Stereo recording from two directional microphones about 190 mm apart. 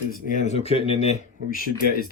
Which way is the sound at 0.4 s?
35° left (ahead or behind).